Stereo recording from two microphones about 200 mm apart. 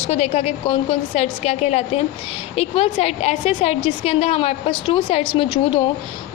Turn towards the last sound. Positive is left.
turn(degrees=25)  # may be behind; listen again after turning